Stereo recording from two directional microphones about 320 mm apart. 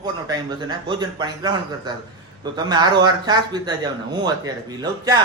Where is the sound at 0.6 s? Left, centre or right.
Centre.